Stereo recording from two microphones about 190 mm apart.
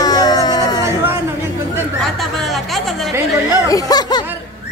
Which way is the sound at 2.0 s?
Centre (ahead or behind).